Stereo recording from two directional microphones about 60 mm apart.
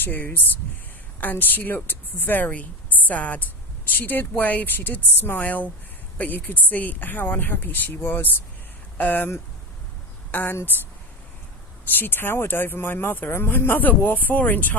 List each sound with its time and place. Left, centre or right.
0.0 s speech: left
10.3 s speech: left
11.9 s speech: left